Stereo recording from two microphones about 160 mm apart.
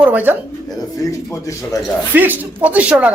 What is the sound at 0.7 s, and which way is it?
Speech, 20° left (ahead or behind).